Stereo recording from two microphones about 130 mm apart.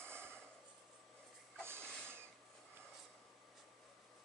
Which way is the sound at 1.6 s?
20° right (ahead or behind).